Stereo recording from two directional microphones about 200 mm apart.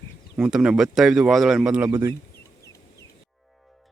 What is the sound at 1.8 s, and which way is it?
Speech, 15° right (ahead or behind).